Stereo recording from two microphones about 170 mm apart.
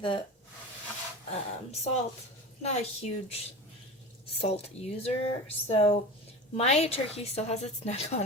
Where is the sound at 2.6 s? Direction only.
40° left (ahead or behind).